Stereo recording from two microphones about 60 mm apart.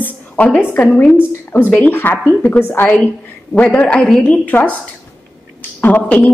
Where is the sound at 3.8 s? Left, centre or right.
Centre.